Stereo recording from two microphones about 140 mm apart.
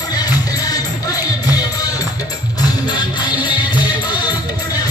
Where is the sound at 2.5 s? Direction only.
30° left (ahead or behind).